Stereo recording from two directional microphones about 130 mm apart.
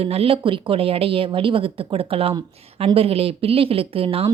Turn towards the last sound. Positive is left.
turn(degrees=-45)  # may be behind; listen again after turning